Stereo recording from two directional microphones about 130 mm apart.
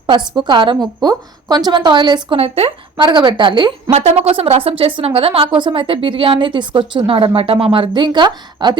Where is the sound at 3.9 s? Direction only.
55° right (ahead or behind).